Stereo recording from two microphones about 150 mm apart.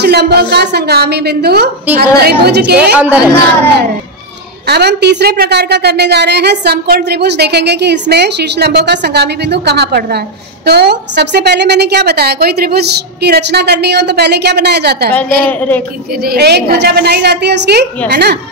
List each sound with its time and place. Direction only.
0.0 s a woman's voice: 90° right
2.8 s speech: 10° right (ahead or behind)
4.6 s a woman's voice: 90° right
16.2 s a woman's voice: 90° right